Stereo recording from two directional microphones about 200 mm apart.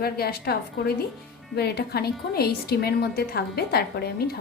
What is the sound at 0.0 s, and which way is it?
A woman's voice, 50° left (ahead or behind).